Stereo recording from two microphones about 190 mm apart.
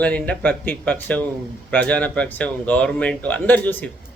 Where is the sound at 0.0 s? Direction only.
5° left (ahead or behind).